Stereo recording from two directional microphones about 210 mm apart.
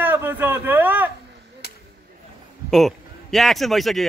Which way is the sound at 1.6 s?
50° left (ahead or behind).